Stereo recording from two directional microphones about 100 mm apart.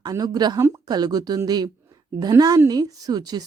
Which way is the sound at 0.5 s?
30° right (ahead or behind).